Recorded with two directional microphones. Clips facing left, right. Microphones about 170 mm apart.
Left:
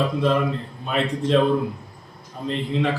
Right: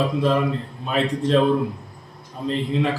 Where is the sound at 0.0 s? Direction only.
Centre (ahead or behind).